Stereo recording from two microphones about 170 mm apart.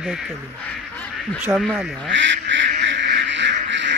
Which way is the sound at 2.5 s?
90° right.